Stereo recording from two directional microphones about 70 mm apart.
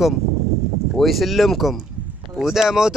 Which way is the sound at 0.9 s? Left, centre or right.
Centre.